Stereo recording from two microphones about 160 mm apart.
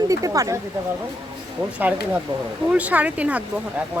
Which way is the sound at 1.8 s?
10° right (ahead or behind).